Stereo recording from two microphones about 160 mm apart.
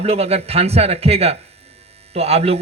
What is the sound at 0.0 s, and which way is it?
Speech, 40° right (ahead or behind).